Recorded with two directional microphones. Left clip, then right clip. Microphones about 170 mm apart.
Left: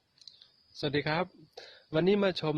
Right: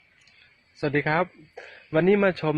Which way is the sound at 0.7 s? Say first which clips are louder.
Right 7 dB; 30° left (ahead or behind).